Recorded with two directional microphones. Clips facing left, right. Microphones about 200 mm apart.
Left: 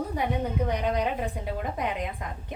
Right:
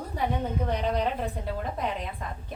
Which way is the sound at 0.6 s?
15° left (ahead or behind).